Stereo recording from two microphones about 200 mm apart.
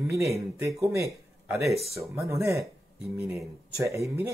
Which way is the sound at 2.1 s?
15° right (ahead or behind).